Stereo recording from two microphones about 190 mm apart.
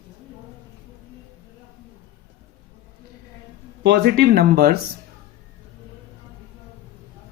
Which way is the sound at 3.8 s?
60° right (ahead or behind).